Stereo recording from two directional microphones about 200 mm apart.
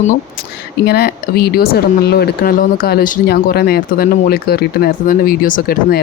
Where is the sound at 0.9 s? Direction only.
50° left (ahead or behind).